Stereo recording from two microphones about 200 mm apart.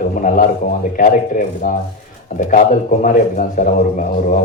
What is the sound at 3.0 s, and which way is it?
Speech, 40° left (ahead or behind).